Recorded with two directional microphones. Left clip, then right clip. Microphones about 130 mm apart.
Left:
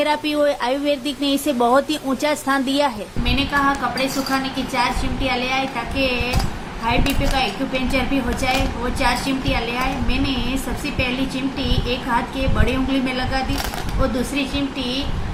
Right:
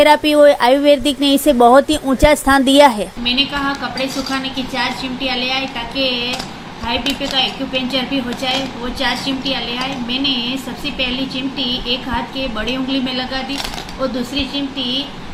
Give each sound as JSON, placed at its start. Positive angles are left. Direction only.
{"t": 0.0, "sound": "a woman's voice", "side_deg": -40}
{"t": 3.2, "sound": "a woman's voice", "side_deg": 15}
{"t": 6.8, "sound": "a woman's voice", "side_deg": 15}
{"t": 9.5, "sound": "a woman's voice", "side_deg": 15}
{"t": 11.9, "sound": "a woman's voice", "side_deg": 15}